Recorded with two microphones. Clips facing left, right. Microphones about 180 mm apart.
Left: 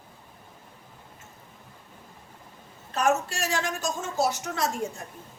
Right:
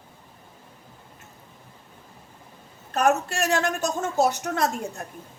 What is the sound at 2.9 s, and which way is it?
A woman's voice, 55° right (ahead or behind).